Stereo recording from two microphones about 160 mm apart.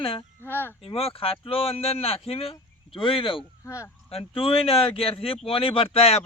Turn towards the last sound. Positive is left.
turn(degrees=40)  # may be behind; listen again after turning